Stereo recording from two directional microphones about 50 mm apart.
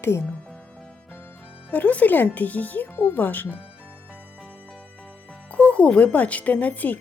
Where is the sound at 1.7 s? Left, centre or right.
Left.